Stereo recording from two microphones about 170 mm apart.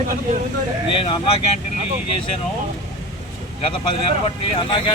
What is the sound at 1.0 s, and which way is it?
Speech, 35° left (ahead or behind).